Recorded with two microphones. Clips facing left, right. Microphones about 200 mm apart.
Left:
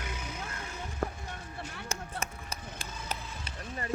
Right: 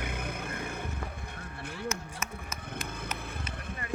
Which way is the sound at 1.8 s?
30° left (ahead or behind).